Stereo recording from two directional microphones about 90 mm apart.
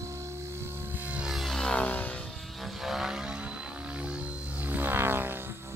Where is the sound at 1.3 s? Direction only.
5° left (ahead or behind).